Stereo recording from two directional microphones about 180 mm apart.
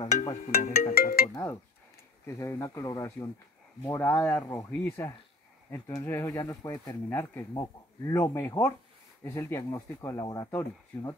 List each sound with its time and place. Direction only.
0.0 s speech: 35° left (ahead or behind)
0.6 s speech: 55° left (ahead or behind)
1.3 s speech: 15° left (ahead or behind)